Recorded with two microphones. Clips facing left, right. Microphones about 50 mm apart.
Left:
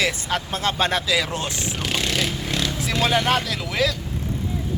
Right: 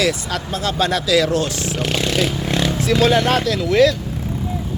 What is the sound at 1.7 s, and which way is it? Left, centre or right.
Vehicle, centre.